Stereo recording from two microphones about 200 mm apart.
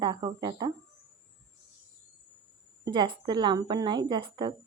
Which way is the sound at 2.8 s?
20° right (ahead or behind).